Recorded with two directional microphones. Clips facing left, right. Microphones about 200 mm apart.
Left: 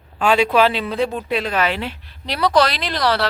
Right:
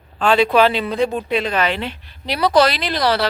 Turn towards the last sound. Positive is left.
turn(degrees=0)  # may be behind; listen again after turning